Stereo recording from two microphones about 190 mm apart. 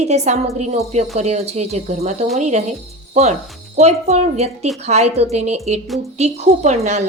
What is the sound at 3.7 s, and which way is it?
A woman's voice, 35° right (ahead or behind).